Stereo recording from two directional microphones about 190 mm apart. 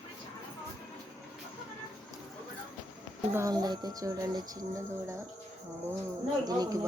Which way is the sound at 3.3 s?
15° right (ahead or behind).